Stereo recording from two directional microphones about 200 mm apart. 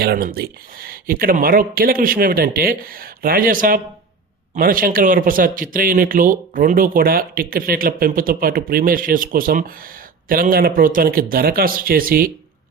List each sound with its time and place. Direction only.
0.0 s speech: 50° right (ahead or behind)